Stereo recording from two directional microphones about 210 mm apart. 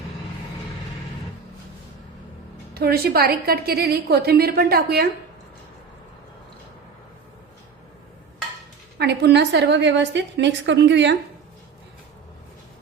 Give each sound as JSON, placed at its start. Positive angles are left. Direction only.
{"t": 2.7, "sound": "a woman's voice", "side_deg": -45}
{"t": 9.0, "sound": "a woman's voice", "side_deg": -50}